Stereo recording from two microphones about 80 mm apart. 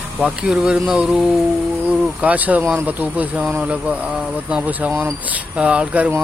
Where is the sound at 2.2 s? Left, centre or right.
Centre.